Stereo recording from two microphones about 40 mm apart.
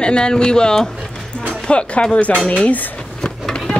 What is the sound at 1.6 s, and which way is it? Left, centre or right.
Speech, left.